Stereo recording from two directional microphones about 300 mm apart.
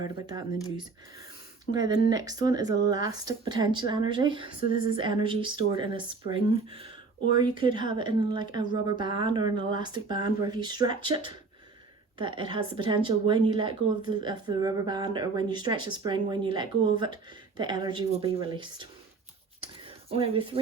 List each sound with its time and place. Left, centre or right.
0.0 s speech: centre
1.7 s speech: centre
20.1 s speech: centre